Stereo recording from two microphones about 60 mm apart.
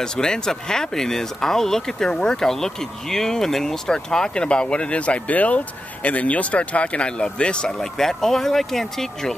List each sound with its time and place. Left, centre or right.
0.0 s speech: centre